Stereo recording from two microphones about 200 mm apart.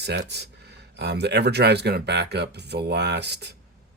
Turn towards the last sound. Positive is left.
turn(degrees=-55)  # may be behind; listen again after turning